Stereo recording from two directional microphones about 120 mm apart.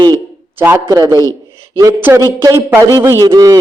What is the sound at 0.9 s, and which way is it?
Speech, 30° right (ahead or behind).